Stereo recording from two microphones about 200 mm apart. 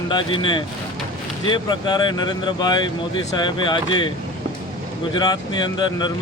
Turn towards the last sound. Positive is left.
turn(degrees=20)  # may be behind; listen again after turning